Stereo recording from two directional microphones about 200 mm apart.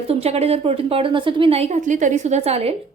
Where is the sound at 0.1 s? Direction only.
30° right (ahead or behind).